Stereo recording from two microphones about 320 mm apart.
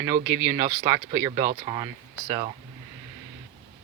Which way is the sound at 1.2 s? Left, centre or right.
Centre.